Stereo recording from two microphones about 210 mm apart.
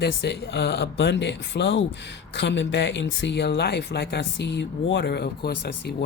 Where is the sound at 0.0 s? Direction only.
55° left (ahead or behind).